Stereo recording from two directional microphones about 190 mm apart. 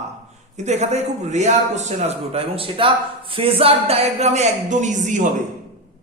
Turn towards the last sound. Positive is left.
turn(degrees=-40)  # may be behind; listen again after turning